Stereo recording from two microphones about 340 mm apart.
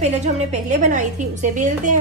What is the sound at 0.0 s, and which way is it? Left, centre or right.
A woman's voice, centre.